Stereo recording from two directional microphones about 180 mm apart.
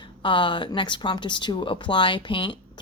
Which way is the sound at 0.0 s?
25° left (ahead or behind).